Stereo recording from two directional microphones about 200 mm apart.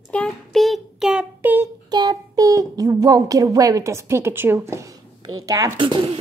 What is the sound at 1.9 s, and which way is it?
A child's voice, 20° right (ahead or behind).